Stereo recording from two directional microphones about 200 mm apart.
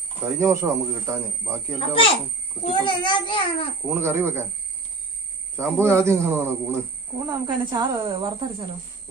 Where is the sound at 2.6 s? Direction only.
25° left (ahead or behind).